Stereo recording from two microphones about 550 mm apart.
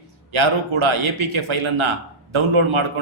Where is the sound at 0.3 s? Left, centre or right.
Right.